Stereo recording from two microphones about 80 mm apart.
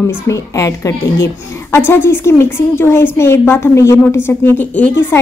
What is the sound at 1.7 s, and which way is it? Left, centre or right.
A woman's voice, left.